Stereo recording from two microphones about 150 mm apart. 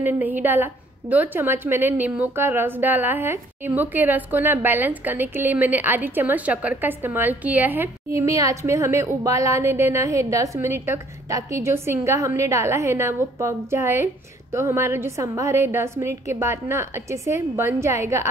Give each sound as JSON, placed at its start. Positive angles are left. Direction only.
{"t": 0.0, "sound": "a woman's voice", "side_deg": -10}